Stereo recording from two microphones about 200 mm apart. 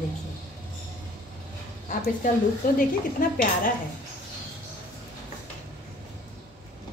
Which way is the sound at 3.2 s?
45° left (ahead or behind).